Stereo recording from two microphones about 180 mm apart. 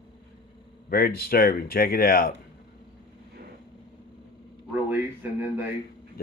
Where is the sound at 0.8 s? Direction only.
55° left (ahead or behind).